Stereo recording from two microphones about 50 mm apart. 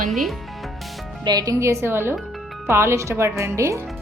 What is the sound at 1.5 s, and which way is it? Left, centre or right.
Speech, right.